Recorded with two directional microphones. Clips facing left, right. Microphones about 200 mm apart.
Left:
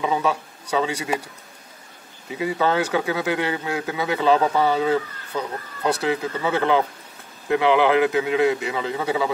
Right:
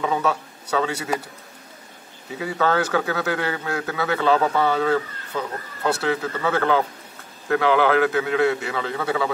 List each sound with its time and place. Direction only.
0.0 s speech: 15° left (ahead or behind)
2.3 s speech: 15° left (ahead or behind)